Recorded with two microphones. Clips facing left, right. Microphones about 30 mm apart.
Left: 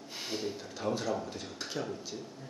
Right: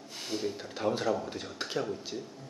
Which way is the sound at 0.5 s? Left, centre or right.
Centre.